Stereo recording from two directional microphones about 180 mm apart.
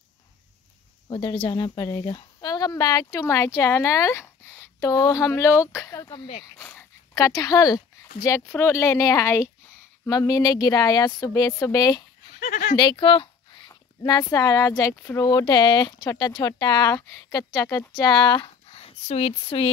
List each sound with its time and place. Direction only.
1.0 s speech: 30° left (ahead or behind)
12.4 s a sound: 45° left (ahead or behind)
12.7 s speech: 25° left (ahead or behind)